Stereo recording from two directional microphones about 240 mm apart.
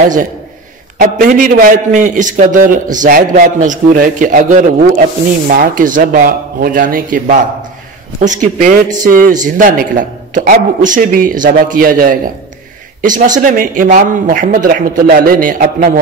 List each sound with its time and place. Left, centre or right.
0.9 s a man's voice: right